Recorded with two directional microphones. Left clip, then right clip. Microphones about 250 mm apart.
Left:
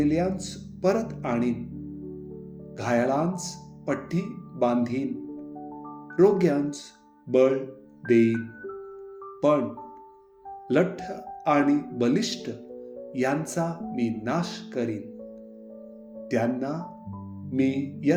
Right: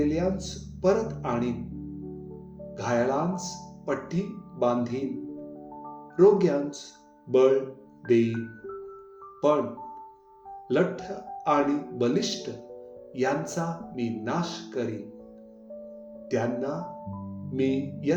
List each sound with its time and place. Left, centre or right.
0.0 s speech: left
2.7 s speech: left
6.1 s speech: left
9.4 s speech: left
10.7 s speech: left
16.3 s speech: left